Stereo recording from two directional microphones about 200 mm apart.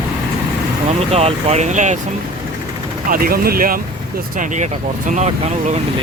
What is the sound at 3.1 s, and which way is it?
Speech, 45° right (ahead or behind).